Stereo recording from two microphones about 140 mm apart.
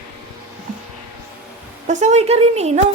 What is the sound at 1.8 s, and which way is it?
Speech, 55° right (ahead or behind).